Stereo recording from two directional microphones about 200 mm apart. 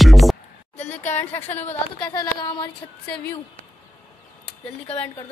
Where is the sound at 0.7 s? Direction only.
35° left (ahead or behind).